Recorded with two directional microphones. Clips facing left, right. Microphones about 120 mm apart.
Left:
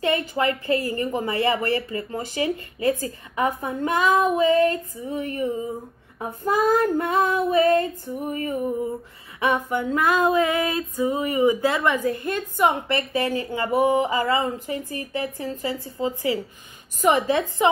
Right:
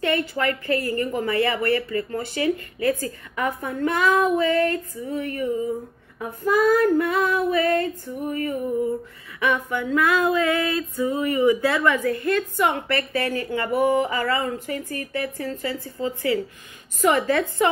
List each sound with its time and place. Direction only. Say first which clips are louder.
0.0 s female singing: left 1 dB; 25° left (ahead or behind)